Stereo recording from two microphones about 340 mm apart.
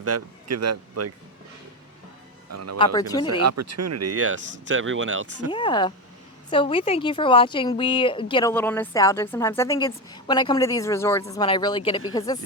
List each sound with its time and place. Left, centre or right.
0.0 s speech: right
2.5 s speech: right
2.7 s a woman's voice: centre
3.4 s speech: right
5.5 s a woman's voice: centre